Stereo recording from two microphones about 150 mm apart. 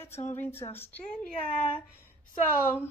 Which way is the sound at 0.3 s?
15° left (ahead or behind).